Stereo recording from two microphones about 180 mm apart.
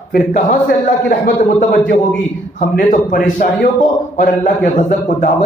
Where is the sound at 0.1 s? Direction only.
55° left (ahead or behind).